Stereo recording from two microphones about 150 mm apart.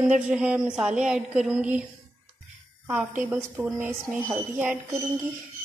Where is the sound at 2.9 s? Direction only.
15° right (ahead or behind).